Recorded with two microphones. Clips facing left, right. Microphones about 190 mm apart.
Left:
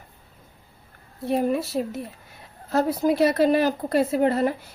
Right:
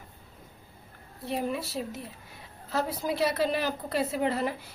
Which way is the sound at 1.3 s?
50° left (ahead or behind).